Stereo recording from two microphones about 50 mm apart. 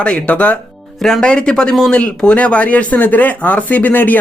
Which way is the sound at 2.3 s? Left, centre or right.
Left.